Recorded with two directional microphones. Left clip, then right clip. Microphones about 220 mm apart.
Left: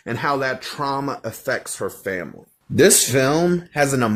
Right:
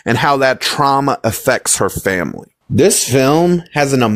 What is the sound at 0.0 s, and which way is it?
Speech, 55° right (ahead or behind).